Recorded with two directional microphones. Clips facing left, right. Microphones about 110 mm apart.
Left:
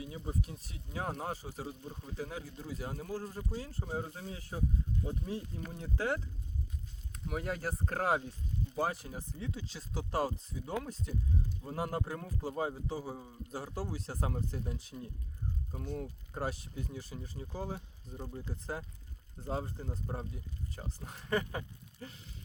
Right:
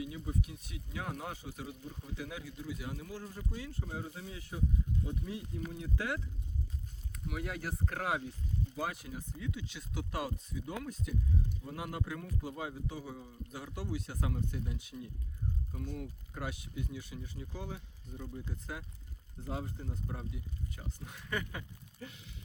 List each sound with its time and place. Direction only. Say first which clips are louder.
0.0 s a man's voice: right 1 dB; 35° left (ahead or behind)
1.8 s speech: left 1 dB; 25° left (ahead or behind)
2.1 s a man's voice: left 2 dB; 35° left (ahead or behind)